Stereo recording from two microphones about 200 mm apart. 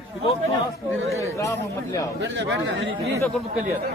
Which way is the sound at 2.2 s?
65° right (ahead or behind).